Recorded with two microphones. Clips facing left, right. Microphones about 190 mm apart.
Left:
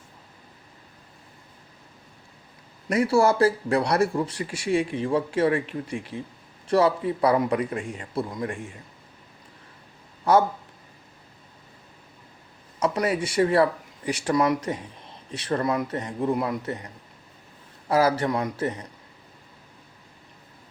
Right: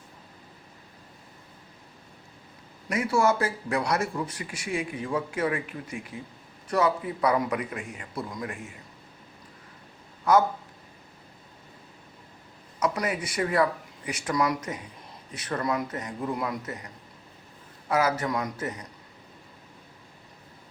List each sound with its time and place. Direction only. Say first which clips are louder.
2.9 s a man's voice: left 4 dB; 35° left (ahead or behind)
12.8 s a man's voice: left 4 dB; 30° left (ahead or behind)